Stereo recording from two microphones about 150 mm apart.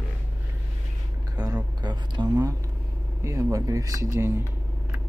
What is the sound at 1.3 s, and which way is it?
Speech, 25° right (ahead or behind).